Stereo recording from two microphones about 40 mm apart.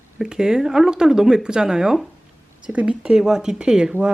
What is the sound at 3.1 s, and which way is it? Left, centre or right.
Speech, centre.